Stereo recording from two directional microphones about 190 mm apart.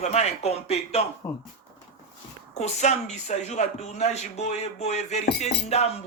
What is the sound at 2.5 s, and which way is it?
A man's voice, 35° left (ahead or behind).